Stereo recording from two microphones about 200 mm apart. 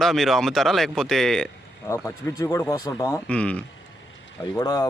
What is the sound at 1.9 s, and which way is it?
Speech, 15° left (ahead or behind).